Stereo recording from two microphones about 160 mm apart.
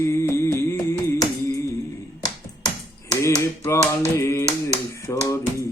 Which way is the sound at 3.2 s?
15° left (ahead or behind).